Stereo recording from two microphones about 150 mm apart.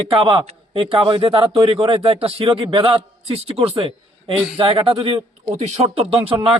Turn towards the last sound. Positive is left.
turn(degrees=-35)  # may be behind; listen again after turning